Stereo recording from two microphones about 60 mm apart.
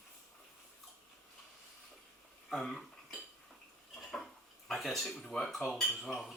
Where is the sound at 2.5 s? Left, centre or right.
Centre.